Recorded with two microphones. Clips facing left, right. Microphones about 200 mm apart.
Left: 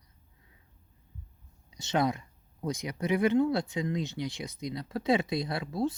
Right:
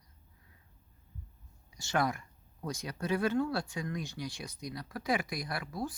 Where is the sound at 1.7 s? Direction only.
20° left (ahead or behind).